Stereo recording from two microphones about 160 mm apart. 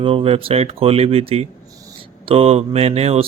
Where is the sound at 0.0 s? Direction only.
35° right (ahead or behind).